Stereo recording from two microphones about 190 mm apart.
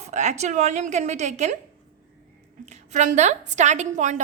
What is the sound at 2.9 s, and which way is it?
A woman's voice, 40° right (ahead or behind).